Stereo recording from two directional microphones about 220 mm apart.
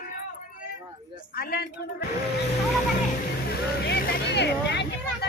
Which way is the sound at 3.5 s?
45° left (ahead or behind).